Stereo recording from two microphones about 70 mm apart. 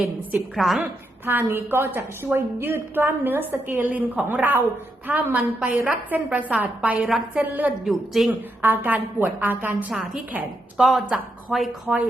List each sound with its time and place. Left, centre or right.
0.0 s a woman's voice: right
0.5 s speech: centre
0.8 s a woman's voice: right
7.9 s speech: centre
8.3 s a woman's voice: right
9.9 s a woman's voice: centre